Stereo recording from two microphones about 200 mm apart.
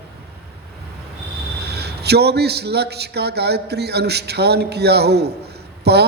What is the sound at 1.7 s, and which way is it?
A man's voice, 55° right (ahead or behind).